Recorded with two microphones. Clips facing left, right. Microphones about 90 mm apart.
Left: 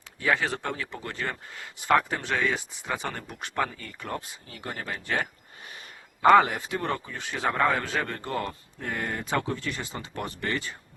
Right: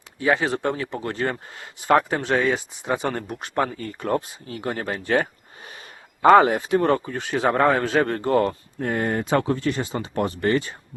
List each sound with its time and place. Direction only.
0.2 s a man's voice: 30° right (ahead or behind)
3.2 s a man's voice: 25° right (ahead or behind)
3.5 s a man's voice: 40° right (ahead or behind)
6.3 s a man's voice: 40° right (ahead or behind)